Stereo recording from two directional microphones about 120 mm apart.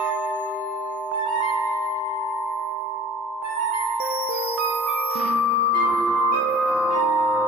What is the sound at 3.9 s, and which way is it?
Music, 15° right (ahead or behind).